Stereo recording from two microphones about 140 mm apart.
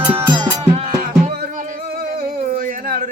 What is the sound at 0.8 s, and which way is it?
Music, 80° right.